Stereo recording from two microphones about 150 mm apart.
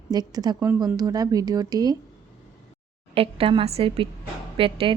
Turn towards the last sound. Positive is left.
turn(degrees=-35)  # may be behind; listen again after turning